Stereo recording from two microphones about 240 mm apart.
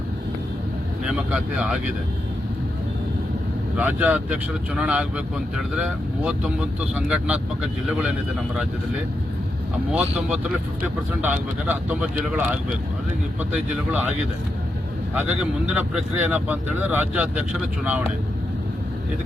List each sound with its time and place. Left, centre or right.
1.0 s speech: centre
3.8 s speech: centre
9.9 s speech: centre
15.3 s speech: centre